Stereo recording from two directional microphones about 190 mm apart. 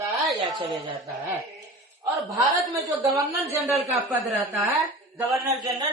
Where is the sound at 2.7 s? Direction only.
15° right (ahead or behind).